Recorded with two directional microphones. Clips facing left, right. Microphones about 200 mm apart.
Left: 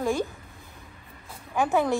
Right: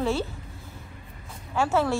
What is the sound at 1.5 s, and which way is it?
Speech, 15° left (ahead or behind).